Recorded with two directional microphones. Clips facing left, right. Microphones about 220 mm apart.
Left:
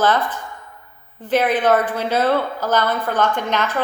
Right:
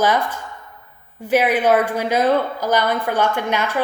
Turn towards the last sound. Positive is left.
turn(degrees=-10)  # may be behind; listen again after turning